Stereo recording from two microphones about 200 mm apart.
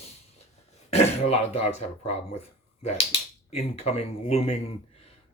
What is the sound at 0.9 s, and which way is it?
Speech, 30° left (ahead or behind).